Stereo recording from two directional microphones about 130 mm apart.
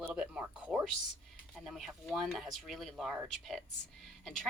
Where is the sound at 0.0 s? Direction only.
10° right (ahead or behind).